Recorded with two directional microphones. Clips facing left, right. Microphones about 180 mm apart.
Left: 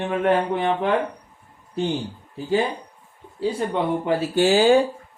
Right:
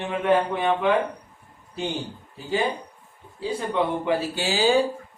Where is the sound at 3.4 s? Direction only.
45° left (ahead or behind).